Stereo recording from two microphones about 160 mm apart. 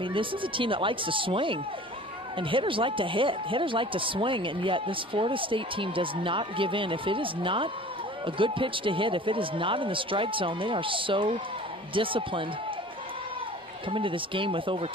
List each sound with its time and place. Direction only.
0.0 s speech: 30° right (ahead or behind)
13.8 s speech: 35° right (ahead or behind)